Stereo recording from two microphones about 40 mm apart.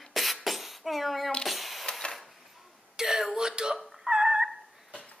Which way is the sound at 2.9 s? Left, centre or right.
Centre.